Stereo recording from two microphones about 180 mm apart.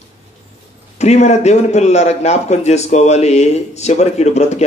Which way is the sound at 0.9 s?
40° left (ahead or behind).